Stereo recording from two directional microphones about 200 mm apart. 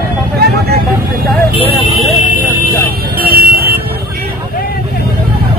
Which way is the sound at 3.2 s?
50° right (ahead or behind).